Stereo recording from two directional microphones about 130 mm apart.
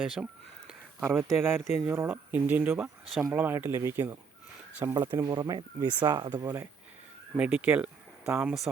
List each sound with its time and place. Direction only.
0.0 s speech: 5° right (ahead or behind)
1.0 s speech: 20° right (ahead or behind)
4.9 s speech: 30° right (ahead or behind)
6.3 s speech: 15° right (ahead or behind)